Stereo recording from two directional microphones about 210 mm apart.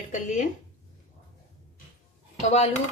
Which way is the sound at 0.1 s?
35° left (ahead or behind).